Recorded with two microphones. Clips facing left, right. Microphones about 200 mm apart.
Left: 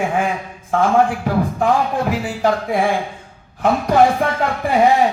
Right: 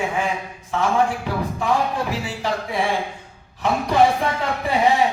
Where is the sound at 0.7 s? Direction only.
50° left (ahead or behind).